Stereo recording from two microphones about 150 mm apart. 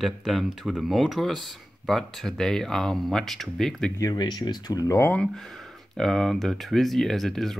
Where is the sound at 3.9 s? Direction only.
25° left (ahead or behind).